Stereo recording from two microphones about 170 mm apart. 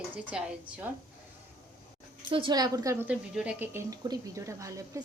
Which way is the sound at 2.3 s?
25° right (ahead or behind).